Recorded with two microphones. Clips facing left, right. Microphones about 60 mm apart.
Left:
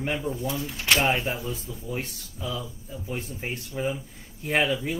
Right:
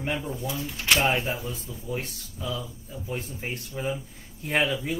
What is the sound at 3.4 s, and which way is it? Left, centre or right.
Speech, centre.